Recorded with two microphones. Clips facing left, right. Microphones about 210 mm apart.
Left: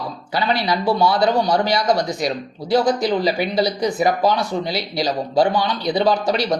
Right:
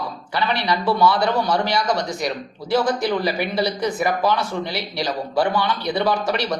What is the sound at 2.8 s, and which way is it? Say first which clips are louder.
Speech: left 3 dB; 20° left (ahead or behind).